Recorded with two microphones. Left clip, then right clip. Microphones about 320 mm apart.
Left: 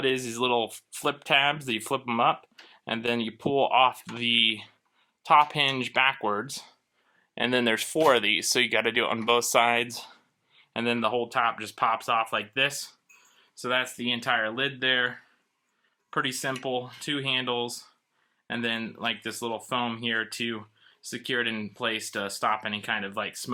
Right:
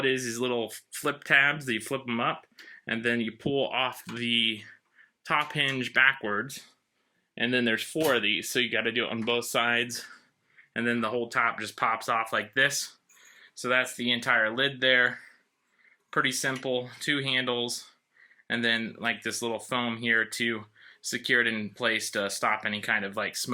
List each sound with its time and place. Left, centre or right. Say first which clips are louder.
0.0 s speech: left 1 dB; centre